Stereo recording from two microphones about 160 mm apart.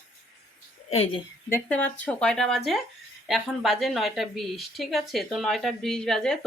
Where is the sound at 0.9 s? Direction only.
35° left (ahead or behind).